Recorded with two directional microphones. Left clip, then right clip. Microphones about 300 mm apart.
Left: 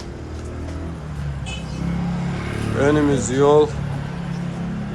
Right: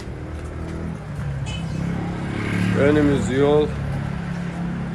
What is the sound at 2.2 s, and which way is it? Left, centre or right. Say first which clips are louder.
Vehicle: right 2 dB; right.